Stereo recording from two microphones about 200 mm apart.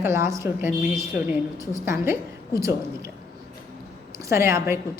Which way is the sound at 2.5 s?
15° right (ahead or behind).